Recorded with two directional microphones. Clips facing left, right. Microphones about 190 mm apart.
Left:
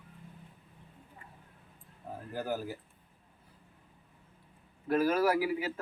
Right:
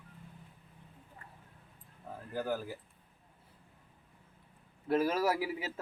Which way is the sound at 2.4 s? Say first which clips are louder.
Even; 5° left (ahead or behind).